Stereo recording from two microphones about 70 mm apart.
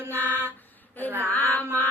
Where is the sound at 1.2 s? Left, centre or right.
Left.